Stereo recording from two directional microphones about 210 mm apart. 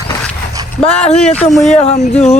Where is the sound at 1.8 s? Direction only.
30° left (ahead or behind).